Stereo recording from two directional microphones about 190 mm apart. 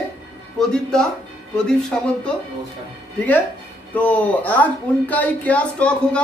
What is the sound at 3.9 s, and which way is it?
A woman's voice, 10° left (ahead or behind).